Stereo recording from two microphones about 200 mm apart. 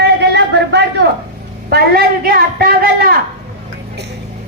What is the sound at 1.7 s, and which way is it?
A woman's voice, 50° right (ahead or behind).